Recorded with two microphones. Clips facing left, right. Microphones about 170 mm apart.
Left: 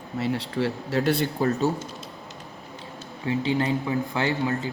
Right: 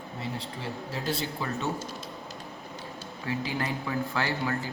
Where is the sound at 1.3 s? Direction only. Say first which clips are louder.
Left 9 dB; 40° left (ahead or behind).